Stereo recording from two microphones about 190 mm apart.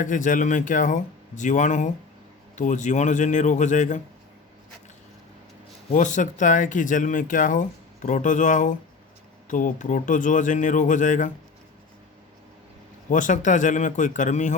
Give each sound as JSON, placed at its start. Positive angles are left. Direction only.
{"t": 0.0, "sound": "speech", "side_deg": 45}
{"t": 5.9, "sound": "speech", "side_deg": 40}
{"t": 13.1, "sound": "speech", "side_deg": 40}